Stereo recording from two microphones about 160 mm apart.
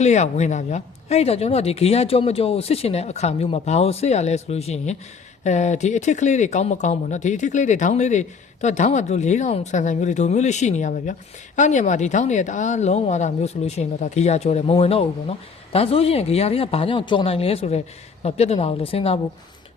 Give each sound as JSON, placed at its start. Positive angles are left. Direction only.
{"t": 0.0, "sound": "speech", "side_deg": 45}